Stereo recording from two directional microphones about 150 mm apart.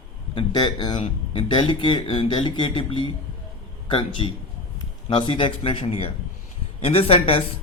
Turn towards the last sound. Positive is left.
turn(degrees=35)  # may be behind; listen again after turning